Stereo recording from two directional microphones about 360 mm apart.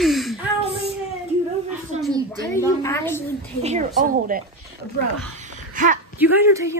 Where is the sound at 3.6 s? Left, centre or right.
Right.